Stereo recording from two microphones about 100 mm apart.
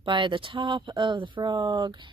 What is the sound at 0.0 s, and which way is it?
Speech, 55° right (ahead or behind).